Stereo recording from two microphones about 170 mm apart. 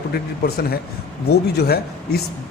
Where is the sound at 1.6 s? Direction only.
65° left (ahead or behind).